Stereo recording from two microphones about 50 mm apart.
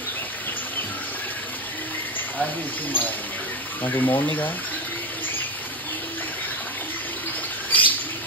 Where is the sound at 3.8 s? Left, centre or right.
Left.